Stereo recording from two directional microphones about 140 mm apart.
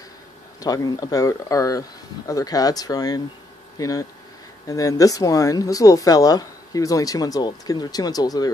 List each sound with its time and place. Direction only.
0.6 s speech: 25° left (ahead or behind)